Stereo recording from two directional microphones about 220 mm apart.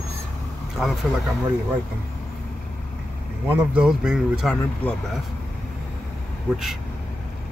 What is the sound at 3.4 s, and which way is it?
Speech, 5° right (ahead or behind).